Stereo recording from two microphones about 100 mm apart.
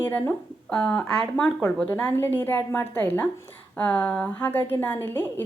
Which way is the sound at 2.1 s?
20° left (ahead or behind).